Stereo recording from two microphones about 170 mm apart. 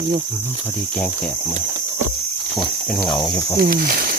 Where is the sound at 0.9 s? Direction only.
10° left (ahead or behind).